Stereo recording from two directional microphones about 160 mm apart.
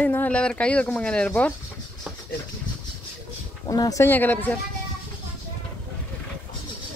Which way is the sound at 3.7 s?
20° left (ahead or behind).